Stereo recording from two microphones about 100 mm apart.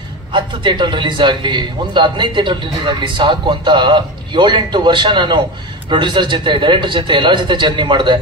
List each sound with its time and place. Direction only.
0.3 s a man's voice: 50° right (ahead or behind)